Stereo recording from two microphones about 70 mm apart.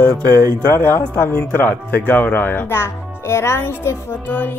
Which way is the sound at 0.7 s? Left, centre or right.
Left.